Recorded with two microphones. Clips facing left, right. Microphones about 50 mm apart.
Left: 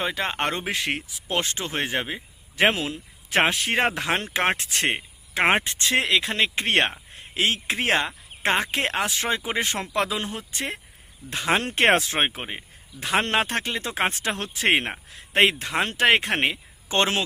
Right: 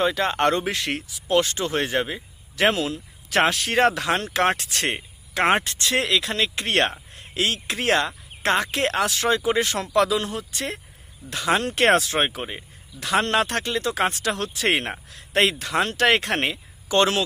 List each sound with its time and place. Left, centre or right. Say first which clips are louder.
0.0 s speech: right 5 dB; centre